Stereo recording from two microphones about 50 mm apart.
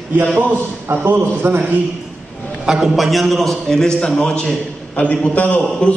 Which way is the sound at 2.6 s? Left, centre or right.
Centre.